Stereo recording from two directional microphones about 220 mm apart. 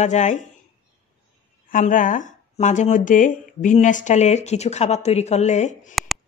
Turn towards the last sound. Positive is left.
turn(degrees=30)  # may be behind; listen again after turning